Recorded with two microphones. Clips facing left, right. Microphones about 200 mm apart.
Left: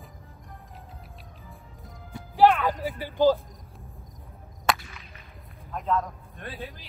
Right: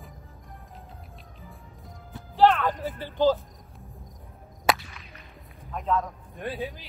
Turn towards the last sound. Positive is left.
turn(degrees=0)  # may be behind; listen again after turning